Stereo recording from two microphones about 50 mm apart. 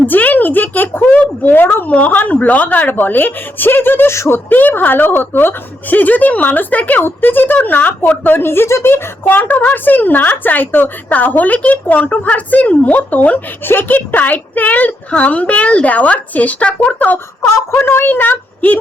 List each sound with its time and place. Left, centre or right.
0.0 s speech: left
1.9 s speech: left
4.1 s speech: left
4.4 s speech: left
8.4 s speech: left
17.4 s speech: left
17.7 s a woman's voice: left